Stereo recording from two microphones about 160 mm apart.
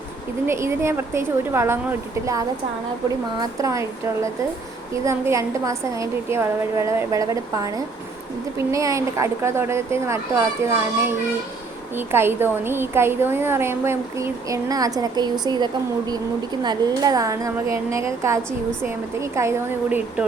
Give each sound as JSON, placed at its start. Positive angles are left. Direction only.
{"t": 0.4, "sound": "a woman's voice", "side_deg": -15}
{"t": 3.6, "sound": "a woman's voice", "side_deg": -20}
{"t": 8.7, "sound": "a woman's voice", "side_deg": -20}